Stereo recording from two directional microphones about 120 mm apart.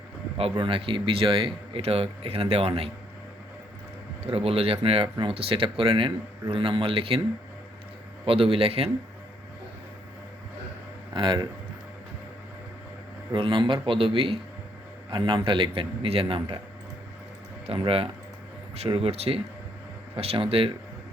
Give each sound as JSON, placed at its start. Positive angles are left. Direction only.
{"t": 0.5, "sound": "speech", "side_deg": -45}
{"t": 4.3, "sound": "speech", "side_deg": -55}
{"t": 8.2, "sound": "speech", "side_deg": -50}
{"t": 11.1, "sound": "speech", "side_deg": -40}
{"t": 13.3, "sound": "speech", "side_deg": -45}
{"t": 17.7, "sound": "speech", "side_deg": -50}